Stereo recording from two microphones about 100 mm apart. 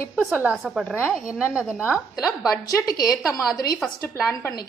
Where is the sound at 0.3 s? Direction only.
15° right (ahead or behind).